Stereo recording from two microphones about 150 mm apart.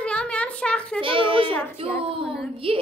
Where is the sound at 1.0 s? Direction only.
35° right (ahead or behind).